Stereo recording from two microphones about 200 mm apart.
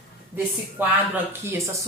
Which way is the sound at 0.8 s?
10° right (ahead or behind).